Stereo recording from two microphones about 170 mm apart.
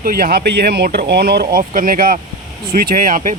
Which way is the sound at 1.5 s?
55° right (ahead or behind).